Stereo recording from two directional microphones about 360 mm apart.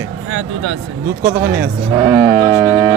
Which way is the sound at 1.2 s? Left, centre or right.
Centre.